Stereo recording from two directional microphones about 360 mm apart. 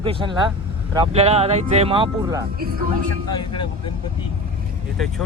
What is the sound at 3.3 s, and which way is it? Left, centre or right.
Speech, centre.